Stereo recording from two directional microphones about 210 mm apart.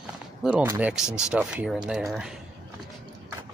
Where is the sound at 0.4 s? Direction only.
5° right (ahead or behind).